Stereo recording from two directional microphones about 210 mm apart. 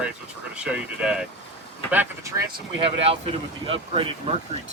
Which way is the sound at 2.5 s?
25° right (ahead or behind).